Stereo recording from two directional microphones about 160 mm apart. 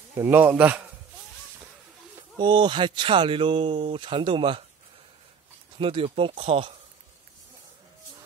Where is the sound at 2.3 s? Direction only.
30° right (ahead or behind).